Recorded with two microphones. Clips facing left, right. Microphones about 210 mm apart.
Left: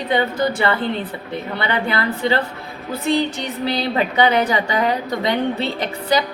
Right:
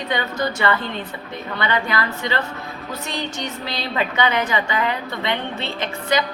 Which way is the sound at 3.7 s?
35° left (ahead or behind).